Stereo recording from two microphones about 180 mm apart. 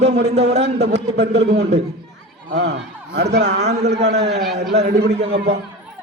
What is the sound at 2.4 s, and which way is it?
A man's voice, 70° right (ahead or behind).